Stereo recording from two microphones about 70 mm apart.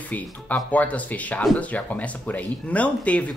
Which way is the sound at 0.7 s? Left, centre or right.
Left.